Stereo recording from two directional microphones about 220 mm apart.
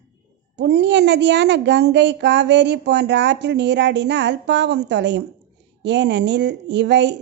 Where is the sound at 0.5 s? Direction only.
50° right (ahead or behind).